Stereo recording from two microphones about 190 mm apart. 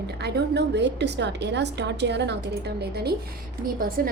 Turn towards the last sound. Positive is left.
turn(degrees=-50)  # may be behind; listen again after turning